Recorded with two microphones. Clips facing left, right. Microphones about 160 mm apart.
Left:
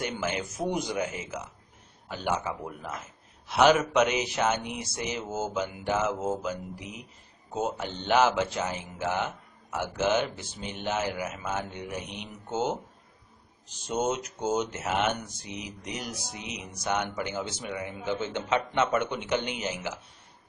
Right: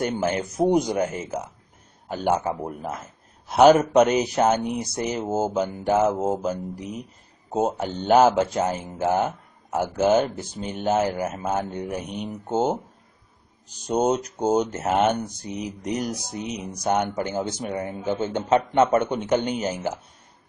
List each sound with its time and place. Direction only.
0.0 s a man's voice: 40° right (ahead or behind)
13.8 s a man's voice: 35° right (ahead or behind)